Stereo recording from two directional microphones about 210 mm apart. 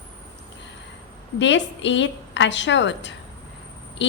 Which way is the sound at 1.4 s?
60° left (ahead or behind).